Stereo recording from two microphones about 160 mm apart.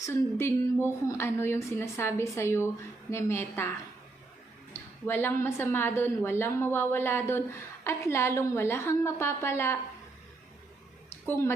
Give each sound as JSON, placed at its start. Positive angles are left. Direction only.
{"t": 0.0, "sound": "a woman's voice", "side_deg": 15}
{"t": 4.7, "sound": "a woman's voice", "side_deg": 15}
{"t": 11.1, "sound": "a sound", "side_deg": 15}